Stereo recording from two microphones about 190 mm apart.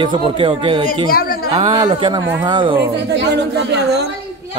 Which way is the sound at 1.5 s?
30° right (ahead or behind).